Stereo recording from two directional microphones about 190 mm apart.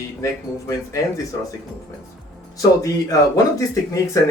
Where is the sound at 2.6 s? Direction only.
20° left (ahead or behind).